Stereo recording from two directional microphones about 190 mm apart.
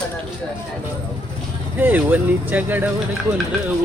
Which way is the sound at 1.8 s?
10° right (ahead or behind).